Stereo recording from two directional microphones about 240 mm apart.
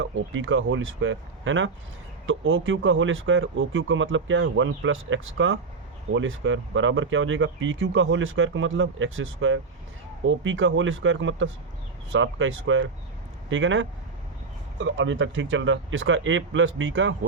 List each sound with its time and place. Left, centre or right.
0.0 s speech: right